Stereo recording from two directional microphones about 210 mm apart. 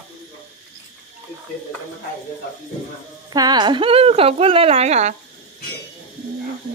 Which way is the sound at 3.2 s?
20° right (ahead or behind).